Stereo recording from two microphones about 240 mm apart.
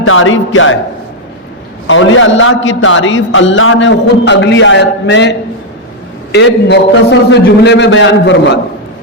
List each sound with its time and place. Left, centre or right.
0.0 s speech: left
1.9 s a man's voice: left